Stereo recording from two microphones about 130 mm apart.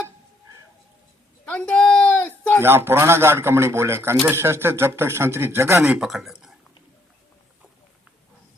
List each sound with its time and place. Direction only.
1.5 s a sound: 5° left (ahead or behind)
2.6 s speech: 20° right (ahead or behind)
6.0 s speech: 5° right (ahead or behind)